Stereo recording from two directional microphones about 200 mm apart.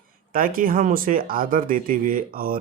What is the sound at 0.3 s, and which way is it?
Speech, 45° right (ahead or behind).